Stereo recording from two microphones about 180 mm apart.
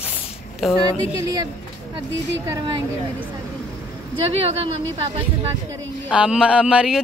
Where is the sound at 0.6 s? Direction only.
Centre (ahead or behind).